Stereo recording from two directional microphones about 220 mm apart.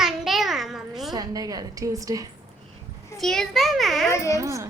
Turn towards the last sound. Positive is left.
turn(degrees=-15)  # may be behind; listen again after turning